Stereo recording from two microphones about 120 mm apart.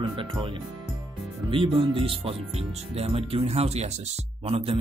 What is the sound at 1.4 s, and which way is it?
Speech, 45° right (ahead or behind).